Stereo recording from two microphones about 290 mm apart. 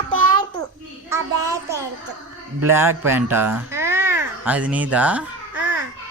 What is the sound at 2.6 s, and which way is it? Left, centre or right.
A child's voice, centre.